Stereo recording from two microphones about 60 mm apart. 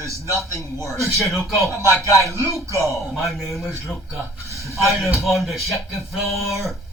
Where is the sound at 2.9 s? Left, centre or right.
Centre.